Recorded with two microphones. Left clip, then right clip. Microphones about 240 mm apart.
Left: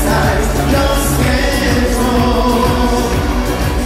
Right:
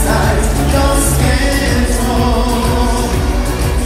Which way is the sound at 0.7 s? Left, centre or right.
Right.